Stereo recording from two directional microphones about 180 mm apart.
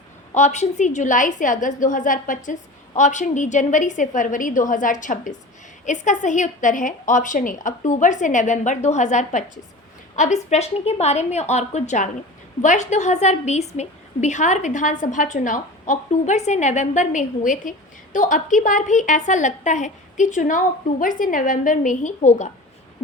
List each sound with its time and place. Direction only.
0.3 s a woman's voice: 40° left (ahead or behind)